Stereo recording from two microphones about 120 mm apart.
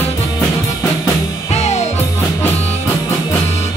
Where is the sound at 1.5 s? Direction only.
65° left (ahead or behind).